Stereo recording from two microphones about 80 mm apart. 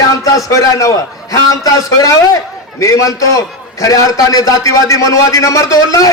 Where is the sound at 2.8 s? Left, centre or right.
Left.